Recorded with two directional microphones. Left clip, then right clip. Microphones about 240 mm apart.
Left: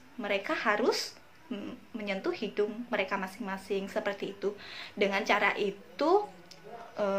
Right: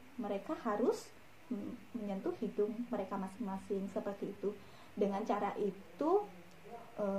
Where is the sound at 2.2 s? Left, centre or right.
Centre.